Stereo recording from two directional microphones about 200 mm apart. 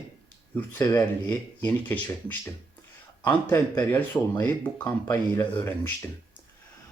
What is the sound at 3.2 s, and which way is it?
Speech, 10° left (ahead or behind).